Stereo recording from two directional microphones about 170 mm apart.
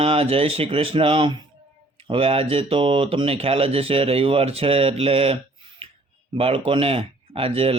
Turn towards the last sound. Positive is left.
turn(degrees=-35)  # may be behind; listen again after turning